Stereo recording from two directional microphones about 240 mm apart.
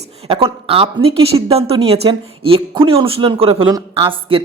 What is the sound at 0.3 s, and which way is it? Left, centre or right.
A woman's voice, right.